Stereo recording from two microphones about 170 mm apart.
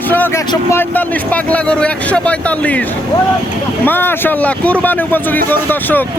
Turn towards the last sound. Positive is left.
turn(degrees=10)  # may be behind; listen again after turning